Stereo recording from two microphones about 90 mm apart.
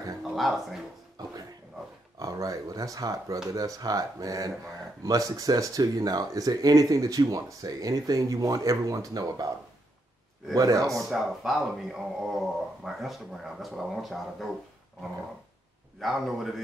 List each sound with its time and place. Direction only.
0.3 s speech: centre (ahead or behind)
2.1 s speech: 40° right (ahead or behind)
10.5 s speech: 40° right (ahead or behind)
11.0 s speech: centre (ahead or behind)
16.0 s speech: centre (ahead or behind)